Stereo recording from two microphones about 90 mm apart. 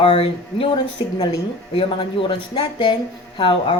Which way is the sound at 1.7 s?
80° left.